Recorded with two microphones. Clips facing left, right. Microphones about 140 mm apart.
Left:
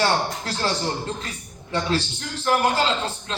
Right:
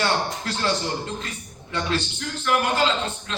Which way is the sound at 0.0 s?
30° left (ahead or behind).